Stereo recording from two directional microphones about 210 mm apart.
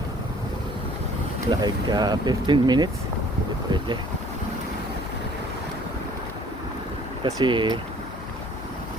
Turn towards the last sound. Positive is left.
turn(degrees=-25)  # may be behind; listen again after turning